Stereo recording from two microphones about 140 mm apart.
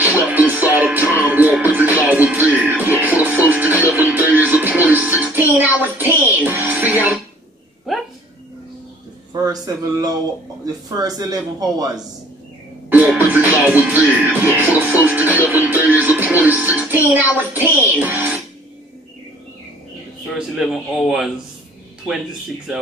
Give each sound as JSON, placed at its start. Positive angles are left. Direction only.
{"t": 0.0, "sound": "music", "side_deg": -10}
{"t": 7.9, "sound": "a sound", "side_deg": 0}
{"t": 9.3, "sound": "a sound", "side_deg": -25}
{"t": 10.6, "sound": "speech", "side_deg": -25}
{"t": 12.9, "sound": "music", "side_deg": -10}
{"t": 20.2, "sound": "a man's voice", "side_deg": -5}